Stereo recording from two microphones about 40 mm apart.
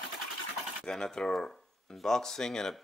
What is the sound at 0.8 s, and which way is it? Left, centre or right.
Speech, centre.